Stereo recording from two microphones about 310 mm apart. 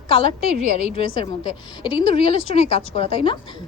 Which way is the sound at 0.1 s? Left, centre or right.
Centre.